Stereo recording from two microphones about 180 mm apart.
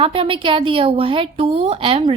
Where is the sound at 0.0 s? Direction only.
30° right (ahead or behind).